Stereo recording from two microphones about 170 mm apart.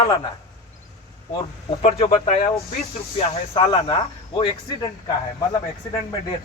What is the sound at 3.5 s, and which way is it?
Speech, 35° left (ahead or behind).